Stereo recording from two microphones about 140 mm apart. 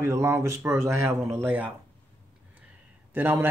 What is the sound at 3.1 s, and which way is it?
Speech, 15° right (ahead or behind).